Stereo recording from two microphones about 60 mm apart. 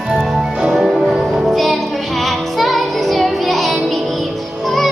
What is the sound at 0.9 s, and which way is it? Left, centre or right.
Music, centre.